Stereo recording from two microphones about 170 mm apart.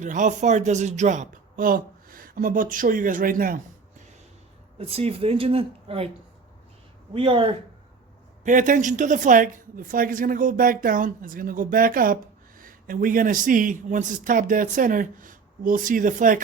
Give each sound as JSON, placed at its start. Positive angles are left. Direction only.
{"t": 0.0, "sound": "a woman's voice", "side_deg": -45}
{"t": 4.8, "sound": "a woman's voice", "side_deg": -35}
{"t": 7.1, "sound": "a woman's voice", "side_deg": -30}
{"t": 8.4, "sound": "a woman's voice", "side_deg": -50}